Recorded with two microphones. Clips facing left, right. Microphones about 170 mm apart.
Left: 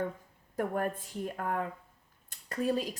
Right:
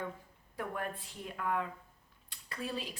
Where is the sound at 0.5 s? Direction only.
45° left (ahead or behind).